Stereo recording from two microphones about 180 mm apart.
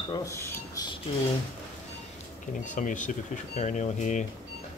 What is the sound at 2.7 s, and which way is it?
Speech, 45° left (ahead or behind).